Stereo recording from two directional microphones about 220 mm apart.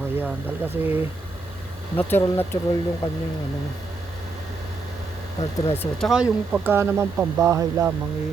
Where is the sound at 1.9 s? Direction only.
10° left (ahead or behind).